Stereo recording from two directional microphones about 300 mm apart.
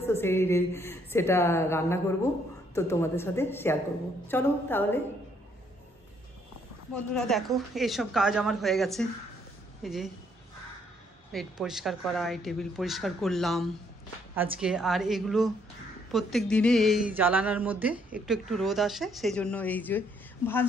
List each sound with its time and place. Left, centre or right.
0.0 s a woman's voice: centre
7.2 s speech: centre
11.3 s speech: centre